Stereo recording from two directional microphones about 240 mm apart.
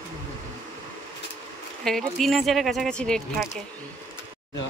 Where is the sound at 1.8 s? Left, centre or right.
Centre.